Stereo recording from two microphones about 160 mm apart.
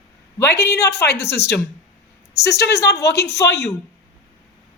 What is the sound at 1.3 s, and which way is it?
A woman's voice, 90° left.